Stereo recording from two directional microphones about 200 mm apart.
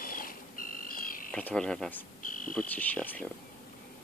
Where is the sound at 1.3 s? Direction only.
5° left (ahead or behind).